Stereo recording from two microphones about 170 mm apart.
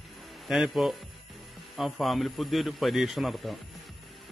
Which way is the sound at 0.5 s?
Centre (ahead or behind).